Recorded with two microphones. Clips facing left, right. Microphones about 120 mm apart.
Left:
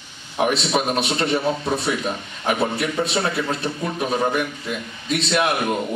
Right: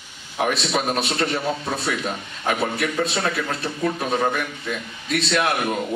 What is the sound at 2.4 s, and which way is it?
A man's voice, 20° left (ahead or behind).